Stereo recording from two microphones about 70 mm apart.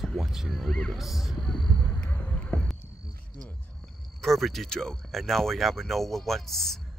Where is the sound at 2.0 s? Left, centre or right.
Centre.